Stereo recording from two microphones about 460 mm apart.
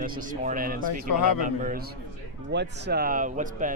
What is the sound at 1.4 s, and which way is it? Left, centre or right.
A man's voice, centre.